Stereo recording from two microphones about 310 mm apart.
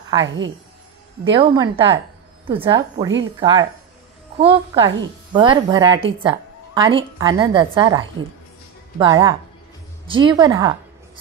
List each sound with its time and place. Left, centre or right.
0.2 s speech: right
1.3 s a woman's voice: centre